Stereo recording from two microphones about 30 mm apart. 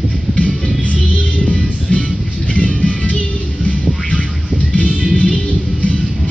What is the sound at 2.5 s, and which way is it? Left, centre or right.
Music, left.